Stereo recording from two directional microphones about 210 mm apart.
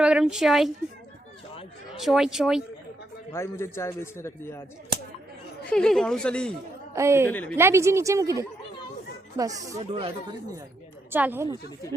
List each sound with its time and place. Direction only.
0.0 s speech: 5° right (ahead or behind)
2.0 s speech: centre (ahead or behind)
3.3 s a man's voice: 10° left (ahead or behind)
5.7 s speech: 5° left (ahead or behind)
6.9 s a woman's voice: 15° right (ahead or behind)
7.3 s a man's voice: 10° left (ahead or behind)
7.5 s a woman's voice: 15° right (ahead or behind)
9.8 s speech: 30° right (ahead or behind)
11.1 s a woman's voice: 10° right (ahead or behind)